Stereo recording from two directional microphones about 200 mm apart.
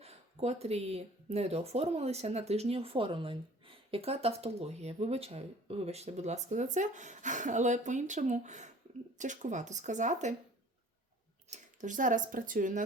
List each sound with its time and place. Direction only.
0.0 s speech: 30° right (ahead or behind)
11.5 s speech: 40° right (ahead or behind)